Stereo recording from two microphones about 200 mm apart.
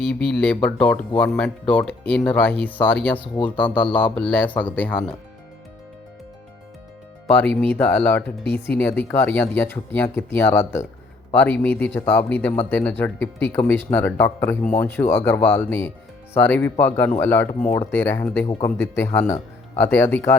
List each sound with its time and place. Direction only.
0.4 s speech: 5° left (ahead or behind)
3.2 s speech: 25° left (ahead or behind)
3.6 s speech: 10° left (ahead or behind)
7.3 s speech: 5° left (ahead or behind)